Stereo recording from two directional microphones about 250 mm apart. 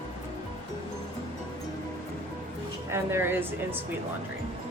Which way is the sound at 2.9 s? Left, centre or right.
Centre.